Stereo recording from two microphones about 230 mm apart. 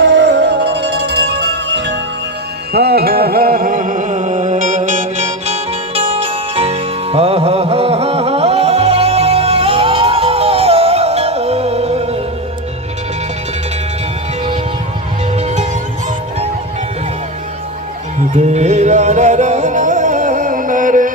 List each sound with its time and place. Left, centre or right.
0.0 s music: right
15.4 s music: right
18.3 s music: right